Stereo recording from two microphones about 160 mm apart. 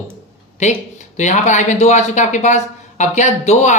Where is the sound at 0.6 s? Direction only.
50° left (ahead or behind).